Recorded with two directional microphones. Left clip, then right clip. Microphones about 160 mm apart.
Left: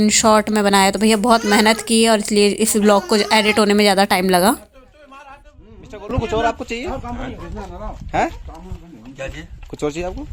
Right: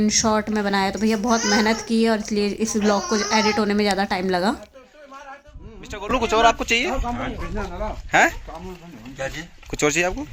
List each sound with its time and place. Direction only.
0.0 s a woman's voice: 20° left (ahead or behind)
5.9 s speech: 5° left (ahead or behind)
6.2 s speech: 15° left (ahead or behind)
6.6 s speech: 5° left (ahead or behind)
8.1 s speech: 10° left (ahead or behind)
9.7 s speech: 5° left (ahead or behind)